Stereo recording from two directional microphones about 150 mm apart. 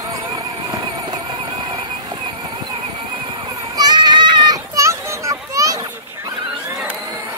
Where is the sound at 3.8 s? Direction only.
30° right (ahead or behind).